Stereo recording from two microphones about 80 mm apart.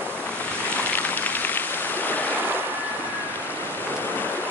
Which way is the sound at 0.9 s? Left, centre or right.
Left.